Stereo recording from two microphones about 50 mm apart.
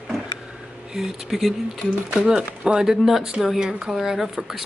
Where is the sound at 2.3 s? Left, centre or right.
Centre.